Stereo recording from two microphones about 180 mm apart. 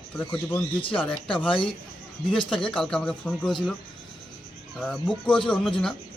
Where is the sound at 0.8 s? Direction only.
30° left (ahead or behind).